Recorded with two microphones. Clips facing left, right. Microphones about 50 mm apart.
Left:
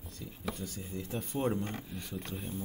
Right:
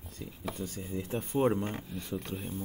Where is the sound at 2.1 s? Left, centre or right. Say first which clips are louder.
Right 3 dB; centre.